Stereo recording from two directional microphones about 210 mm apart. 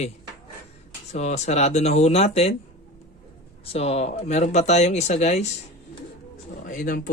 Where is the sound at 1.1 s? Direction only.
30° left (ahead or behind).